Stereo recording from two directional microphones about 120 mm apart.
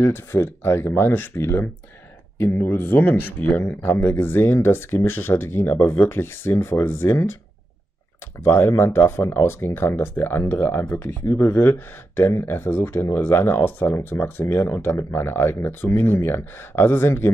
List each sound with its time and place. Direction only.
0.0 s speech: 20° left (ahead or behind)
8.5 s speech: 20° left (ahead or behind)